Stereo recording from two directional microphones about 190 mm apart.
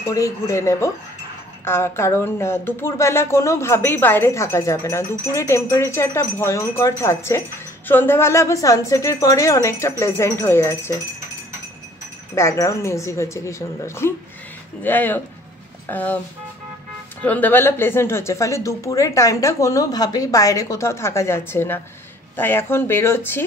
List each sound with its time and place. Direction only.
0.0 s speech: 15° left (ahead or behind)
12.4 s speech: 15° left (ahead or behind)
17.2 s speech: 10° left (ahead or behind)